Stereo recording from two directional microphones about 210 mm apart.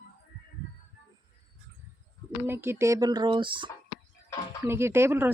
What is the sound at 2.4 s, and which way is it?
Speech, 10° right (ahead or behind).